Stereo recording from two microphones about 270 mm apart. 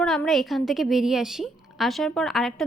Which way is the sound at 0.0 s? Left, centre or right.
Centre.